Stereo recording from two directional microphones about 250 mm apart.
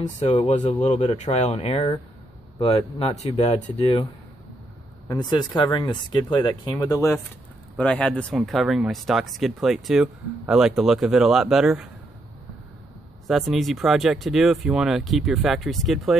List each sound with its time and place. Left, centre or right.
0.0 s speech: left
5.0 s speech: centre
13.3 s speech: centre